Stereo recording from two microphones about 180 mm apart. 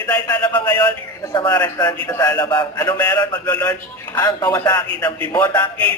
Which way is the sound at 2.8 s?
10° left (ahead or behind).